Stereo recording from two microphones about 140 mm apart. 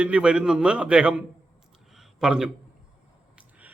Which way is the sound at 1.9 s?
5° right (ahead or behind).